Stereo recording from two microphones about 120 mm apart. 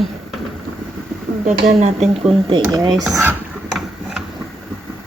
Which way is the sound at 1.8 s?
65° right (ahead or behind).